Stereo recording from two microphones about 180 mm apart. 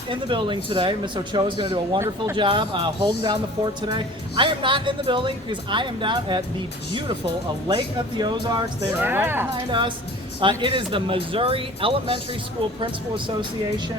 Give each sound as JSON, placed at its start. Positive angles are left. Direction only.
{"t": 0.1, "sound": "speech", "side_deg": -25}
{"t": 7.7, "sound": "speech", "side_deg": -25}
{"t": 9.0, "sound": "speech", "side_deg": -10}
{"t": 9.6, "sound": "speech", "side_deg": -25}